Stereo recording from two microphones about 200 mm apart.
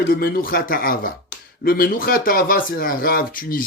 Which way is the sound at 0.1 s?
45° left (ahead or behind).